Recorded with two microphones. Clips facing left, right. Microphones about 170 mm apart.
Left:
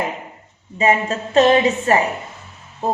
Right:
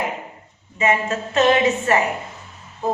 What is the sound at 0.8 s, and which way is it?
A woman's voice, 35° left (ahead or behind).